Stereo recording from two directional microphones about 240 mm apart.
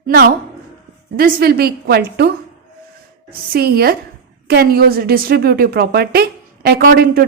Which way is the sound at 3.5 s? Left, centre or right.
Right.